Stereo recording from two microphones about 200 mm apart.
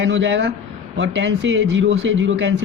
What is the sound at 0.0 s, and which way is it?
Speech, 65° right (ahead or behind).